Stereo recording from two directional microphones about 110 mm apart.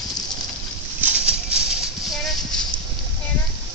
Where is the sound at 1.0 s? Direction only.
10° right (ahead or behind).